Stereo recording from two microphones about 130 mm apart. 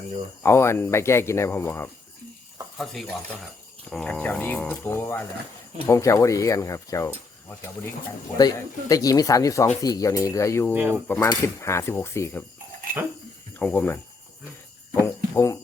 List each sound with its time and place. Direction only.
0.4 s speech: 20° left (ahead or behind)
2.7 s speech: centre (ahead or behind); by 7.1 s 25° left (ahead or behind)
8.4 s speech: 30° left (ahead or behind)
10.8 s cutlery: 15° right (ahead or behind)
11.4 s speech: 20° left (ahead or behind)
13.6 s speech: 10° left (ahead or behind)